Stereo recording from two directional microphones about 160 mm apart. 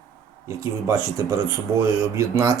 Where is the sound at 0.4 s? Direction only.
20° right (ahead or behind).